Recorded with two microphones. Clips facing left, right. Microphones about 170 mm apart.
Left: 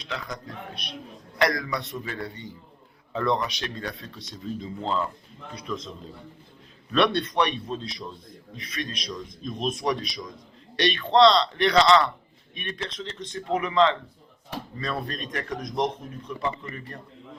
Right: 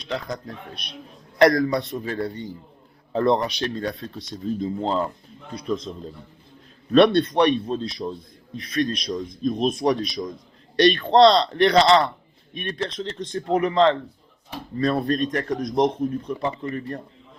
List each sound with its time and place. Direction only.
1.4 s speech: 40° right (ahead or behind)
6.9 s speech: 35° right (ahead or behind)